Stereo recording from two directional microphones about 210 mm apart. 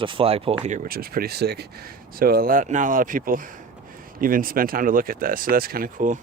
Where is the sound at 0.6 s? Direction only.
40° right (ahead or behind).